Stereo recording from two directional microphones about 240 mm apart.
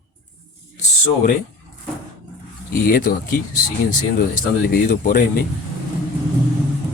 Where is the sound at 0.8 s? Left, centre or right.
Left.